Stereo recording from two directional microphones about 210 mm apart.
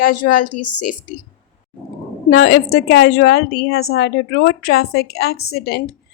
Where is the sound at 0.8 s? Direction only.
90° left.